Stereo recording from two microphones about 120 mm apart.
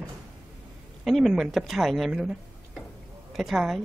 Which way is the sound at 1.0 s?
Centre (ahead or behind).